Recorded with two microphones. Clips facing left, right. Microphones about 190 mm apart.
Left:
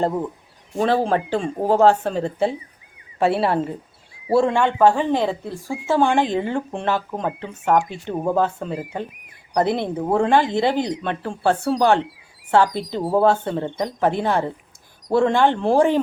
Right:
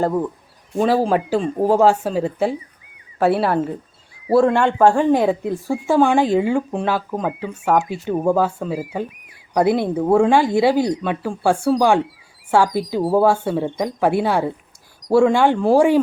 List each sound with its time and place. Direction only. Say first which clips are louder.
0.8 s a woman's voice: right 2 dB; 5° right (ahead or behind)
4.4 s speech: right 3 dB; 15° left (ahead or behind)
4.6 s a woman's voice: right 2 dB; 10° right (ahead or behind)